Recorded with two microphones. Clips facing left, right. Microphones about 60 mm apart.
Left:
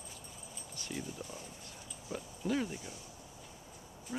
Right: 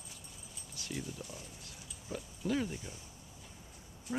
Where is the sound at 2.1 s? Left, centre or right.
Centre.